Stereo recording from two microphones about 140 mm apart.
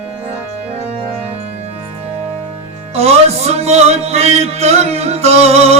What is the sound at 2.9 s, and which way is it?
Music, 50° right (ahead or behind).